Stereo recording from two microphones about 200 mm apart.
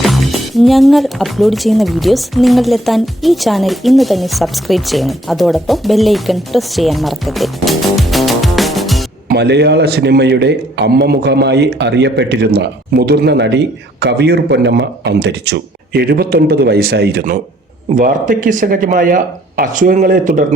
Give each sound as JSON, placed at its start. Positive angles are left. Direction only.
{"t": 0.0, "sound": "speech", "side_deg": 0}
{"t": 9.3, "sound": "a man's voice", "side_deg": -55}